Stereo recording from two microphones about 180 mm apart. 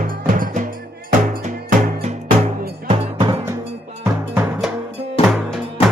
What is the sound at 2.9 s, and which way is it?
Music, 25° right (ahead or behind).